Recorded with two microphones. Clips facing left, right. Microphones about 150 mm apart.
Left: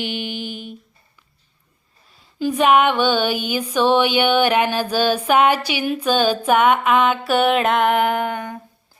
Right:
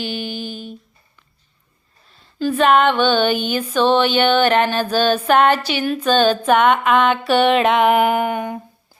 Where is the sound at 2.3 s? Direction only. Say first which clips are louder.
Right 1 dB; 15° left (ahead or behind); by 8.6 s 10° right (ahead or behind).